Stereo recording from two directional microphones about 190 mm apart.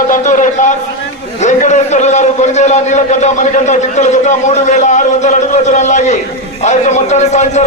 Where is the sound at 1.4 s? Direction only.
40° left (ahead or behind).